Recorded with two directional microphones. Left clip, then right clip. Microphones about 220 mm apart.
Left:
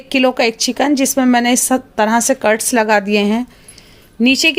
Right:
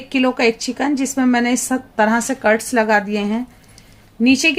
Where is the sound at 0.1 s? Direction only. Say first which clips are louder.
Left 3 dB; 40° left (ahead or behind).